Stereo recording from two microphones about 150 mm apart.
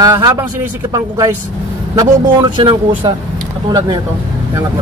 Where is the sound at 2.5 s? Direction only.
35° right (ahead or behind).